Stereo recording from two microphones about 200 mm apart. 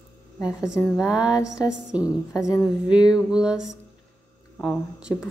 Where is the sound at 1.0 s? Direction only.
5° right (ahead or behind).